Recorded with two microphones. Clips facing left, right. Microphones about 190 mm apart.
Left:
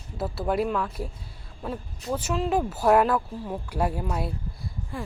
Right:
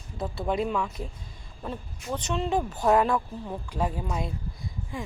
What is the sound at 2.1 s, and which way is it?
Speech, 5° left (ahead or behind).